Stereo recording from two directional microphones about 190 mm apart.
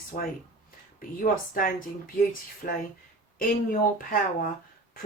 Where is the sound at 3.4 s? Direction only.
50° left (ahead or behind).